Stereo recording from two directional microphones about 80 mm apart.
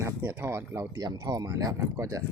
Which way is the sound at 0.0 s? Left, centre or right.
Right.